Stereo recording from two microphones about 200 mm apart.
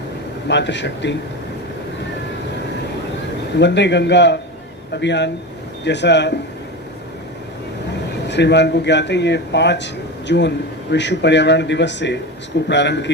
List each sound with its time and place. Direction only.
0.4 s speech: 60° left (ahead or behind)
3.6 s speech: 60° left (ahead or behind)
8.3 s speech: 60° left (ahead or behind)